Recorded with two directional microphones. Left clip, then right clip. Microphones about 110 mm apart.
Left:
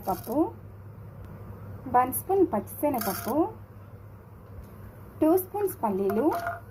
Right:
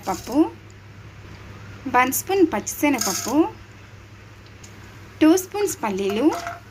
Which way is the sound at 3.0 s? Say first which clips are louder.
Right 6 dB; 15° right (ahead or behind).